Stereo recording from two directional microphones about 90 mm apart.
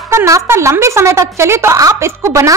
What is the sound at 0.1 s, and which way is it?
A woman's voice, 30° right (ahead or behind).